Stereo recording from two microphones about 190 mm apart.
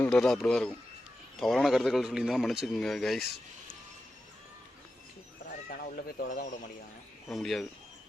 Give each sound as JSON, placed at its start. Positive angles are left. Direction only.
{"t": 0.0, "sound": "a man's voice", "side_deg": 5}
{"t": 5.5, "sound": "horse", "side_deg": 50}
{"t": 7.3, "sound": "a man's voice", "side_deg": 0}